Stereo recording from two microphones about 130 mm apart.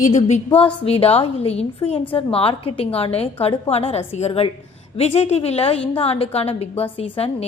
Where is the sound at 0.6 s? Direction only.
45° left (ahead or behind).